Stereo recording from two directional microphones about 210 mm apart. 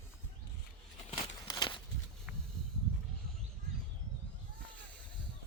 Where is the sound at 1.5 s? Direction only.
20° left (ahead or behind).